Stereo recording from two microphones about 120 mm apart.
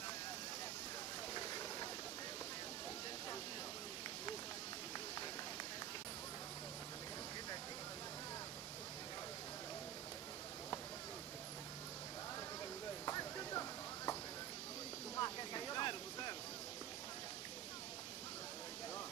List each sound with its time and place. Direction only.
1.3 s a sound: 30° left (ahead or behind)
13.0 s clip-clop: 30° left (ahead or behind)
15.1 s vehicle: 35° left (ahead or behind)